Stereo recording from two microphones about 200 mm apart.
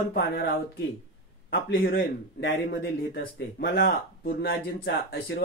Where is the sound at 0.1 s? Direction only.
50° left (ahead or behind).